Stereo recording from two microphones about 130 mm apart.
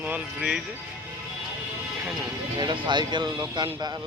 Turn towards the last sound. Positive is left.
turn(degrees=-30)  # may be behind; listen again after turning